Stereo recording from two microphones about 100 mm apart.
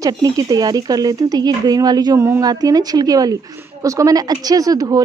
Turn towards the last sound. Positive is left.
turn(degrees=-40)  # may be behind; listen again after turning